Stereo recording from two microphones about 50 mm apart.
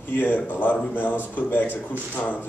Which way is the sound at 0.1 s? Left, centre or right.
Left.